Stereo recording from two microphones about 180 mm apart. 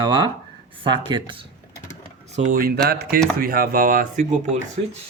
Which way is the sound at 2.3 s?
45° right (ahead or behind).